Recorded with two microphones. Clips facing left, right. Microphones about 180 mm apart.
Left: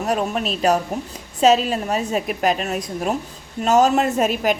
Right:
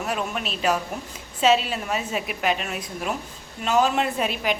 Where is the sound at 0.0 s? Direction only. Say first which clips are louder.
Left 6 dB; 40° left (ahead or behind).